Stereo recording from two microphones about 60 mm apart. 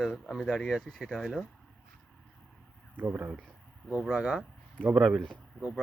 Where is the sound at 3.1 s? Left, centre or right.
Centre.